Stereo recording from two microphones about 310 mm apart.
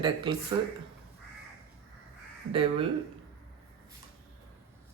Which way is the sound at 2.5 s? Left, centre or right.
Centre.